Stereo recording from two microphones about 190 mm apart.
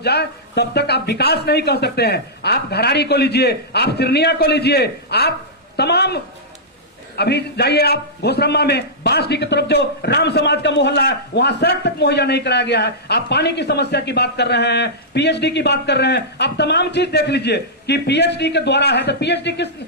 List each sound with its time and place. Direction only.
0.0 s a man's voice: 60° left (ahead or behind)
7.2 s a man's voice: 60° left (ahead or behind)